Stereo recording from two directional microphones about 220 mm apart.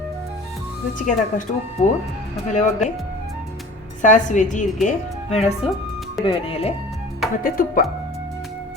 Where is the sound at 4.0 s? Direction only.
35° left (ahead or behind).